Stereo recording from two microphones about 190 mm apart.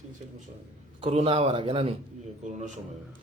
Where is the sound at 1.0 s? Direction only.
30° right (ahead or behind).